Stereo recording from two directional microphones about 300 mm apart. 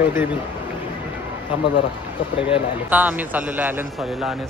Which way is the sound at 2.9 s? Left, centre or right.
Centre.